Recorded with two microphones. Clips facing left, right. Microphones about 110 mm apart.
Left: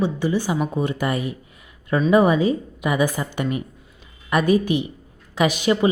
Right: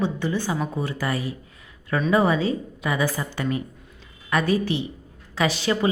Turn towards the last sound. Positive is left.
turn(degrees=15)  # may be behind; listen again after turning